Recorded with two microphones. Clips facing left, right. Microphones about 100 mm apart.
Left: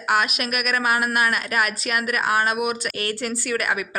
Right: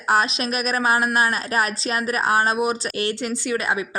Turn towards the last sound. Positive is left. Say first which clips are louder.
# right 1 dB
turn(degrees=-25)  # may be behind; listen again after turning